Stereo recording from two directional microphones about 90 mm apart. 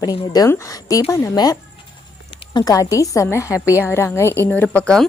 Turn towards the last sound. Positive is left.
turn(degrees=15)  # may be behind; listen again after turning